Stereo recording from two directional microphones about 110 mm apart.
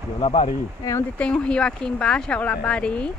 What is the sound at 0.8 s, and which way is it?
Speech, 30° left (ahead or behind).